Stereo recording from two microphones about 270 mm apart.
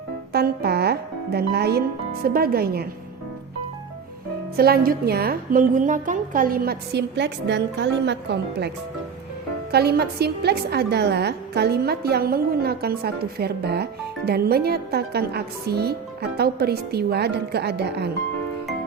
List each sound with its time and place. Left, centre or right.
0.3 s music: right
2.2 s a woman's voice: right
4.5 s a woman's voice: right
9.7 s a woman's voice: right